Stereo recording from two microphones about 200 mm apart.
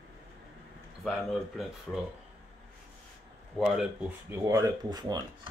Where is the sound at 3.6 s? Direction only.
5° right (ahead or behind); by 5.2 s 20° right (ahead or behind).